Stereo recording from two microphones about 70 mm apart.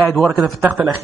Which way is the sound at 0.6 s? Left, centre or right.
Right.